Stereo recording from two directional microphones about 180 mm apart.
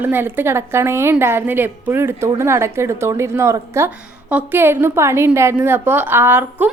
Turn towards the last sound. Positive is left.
turn(degrees=-10)  # may be behind; listen again after turning